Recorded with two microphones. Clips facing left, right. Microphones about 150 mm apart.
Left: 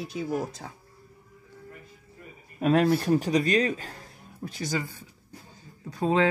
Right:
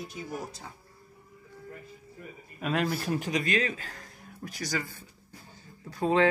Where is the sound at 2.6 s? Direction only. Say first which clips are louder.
Left 7 dB; 40° left (ahead or behind).